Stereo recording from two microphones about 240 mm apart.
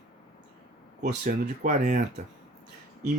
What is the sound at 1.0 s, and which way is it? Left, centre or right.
Speech, right.